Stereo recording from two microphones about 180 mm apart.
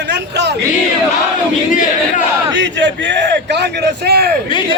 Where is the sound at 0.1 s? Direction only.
70° right (ahead or behind).